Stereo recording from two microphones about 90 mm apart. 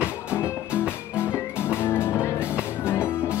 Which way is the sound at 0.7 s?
15° right (ahead or behind).